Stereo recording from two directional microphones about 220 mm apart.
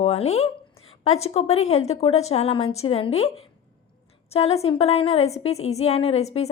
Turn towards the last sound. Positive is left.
turn(degrees=30)  # may be behind; listen again after turning